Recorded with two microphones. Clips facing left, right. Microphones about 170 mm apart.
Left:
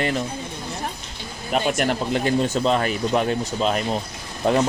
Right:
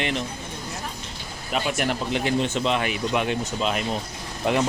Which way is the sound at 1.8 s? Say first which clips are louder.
Left 3 dB; 40° left (ahead or behind).